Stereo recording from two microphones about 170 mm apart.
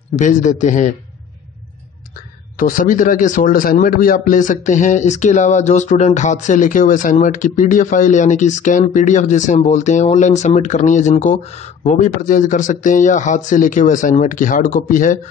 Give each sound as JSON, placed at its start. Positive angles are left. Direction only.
{"t": 0.1, "sound": "a man's voice", "side_deg": 45}
{"t": 2.5, "sound": "a man's voice", "side_deg": 55}